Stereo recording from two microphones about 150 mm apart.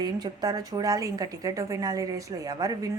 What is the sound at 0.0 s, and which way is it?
A woman's voice, 25° right (ahead or behind).